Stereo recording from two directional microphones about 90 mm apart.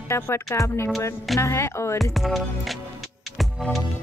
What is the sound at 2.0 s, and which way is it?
Music, centre (ahead or behind).